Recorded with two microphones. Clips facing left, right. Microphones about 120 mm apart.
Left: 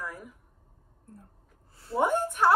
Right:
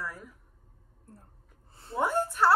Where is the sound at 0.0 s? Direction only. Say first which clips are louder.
Left 1 dB; 10° left (ahead or behind).